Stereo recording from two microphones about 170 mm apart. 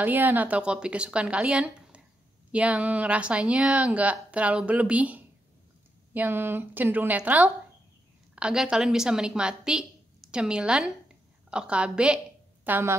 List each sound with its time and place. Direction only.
0.0 s a woman's voice: 10° right (ahead or behind)